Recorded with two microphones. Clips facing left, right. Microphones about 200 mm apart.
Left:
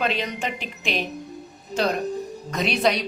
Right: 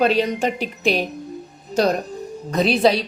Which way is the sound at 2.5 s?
35° right (ahead or behind).